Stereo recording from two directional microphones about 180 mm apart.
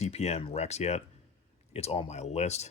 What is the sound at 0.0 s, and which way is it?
Speech, 35° left (ahead or behind).